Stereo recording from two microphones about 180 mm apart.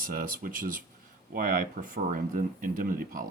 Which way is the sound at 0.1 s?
50° right (ahead or behind).